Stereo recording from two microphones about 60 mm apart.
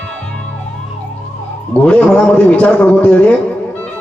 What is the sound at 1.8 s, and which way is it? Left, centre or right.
Speech, left.